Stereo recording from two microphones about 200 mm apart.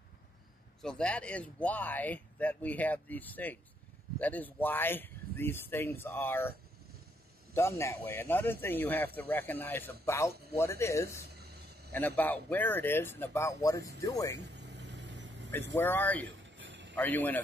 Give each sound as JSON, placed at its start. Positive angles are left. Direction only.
{"t": 0.8, "sound": "speech", "side_deg": 5}
{"t": 7.5, "sound": "speech", "side_deg": 15}
{"t": 11.1, "sound": "a sound", "side_deg": -55}
{"t": 12.2, "sound": "speech", "side_deg": 10}
{"t": 14.4, "sound": "vehicle", "side_deg": -60}
{"t": 15.7, "sound": "speech", "side_deg": 10}
{"t": 16.2, "sound": "a sound", "side_deg": -70}
{"t": 16.9, "sound": "speech", "side_deg": 10}